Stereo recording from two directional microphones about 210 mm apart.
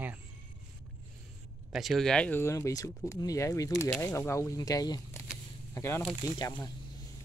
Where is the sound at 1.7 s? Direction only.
Centre (ahead or behind); by 6.7 s 15° left (ahead or behind).